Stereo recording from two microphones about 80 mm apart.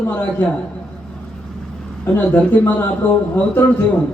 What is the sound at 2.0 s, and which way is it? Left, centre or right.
A man's voice, left.